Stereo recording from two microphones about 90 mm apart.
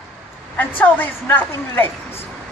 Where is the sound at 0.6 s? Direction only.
20° left (ahead or behind).